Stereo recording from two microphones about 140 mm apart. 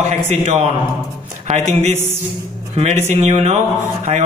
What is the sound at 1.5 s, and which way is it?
Speech, 50° right (ahead or behind).